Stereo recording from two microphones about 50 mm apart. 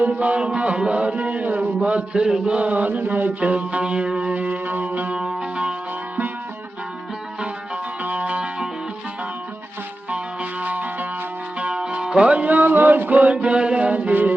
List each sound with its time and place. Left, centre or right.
0.0 s a sound: right
2.2 s mantra: centre; by 3.3 s right
3.4 s music: right
5.1 s music: centre
8.0 s music: right
10.6 s music: right
11.7 s music: centre; by 14.3 s right